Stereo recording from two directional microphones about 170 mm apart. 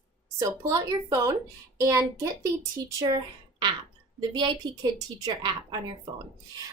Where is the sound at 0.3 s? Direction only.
20° right (ahead or behind).